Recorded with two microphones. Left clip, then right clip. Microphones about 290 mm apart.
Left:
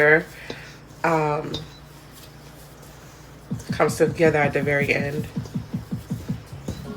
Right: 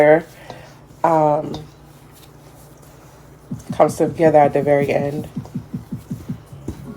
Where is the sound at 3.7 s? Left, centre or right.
Right.